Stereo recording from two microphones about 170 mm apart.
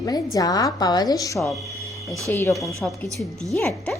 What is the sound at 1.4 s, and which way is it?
Speech, centre (ahead or behind).